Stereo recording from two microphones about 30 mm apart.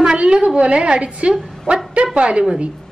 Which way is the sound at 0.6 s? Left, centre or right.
Right.